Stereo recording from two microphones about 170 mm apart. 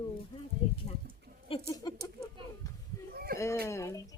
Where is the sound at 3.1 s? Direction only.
60° right (ahead or behind).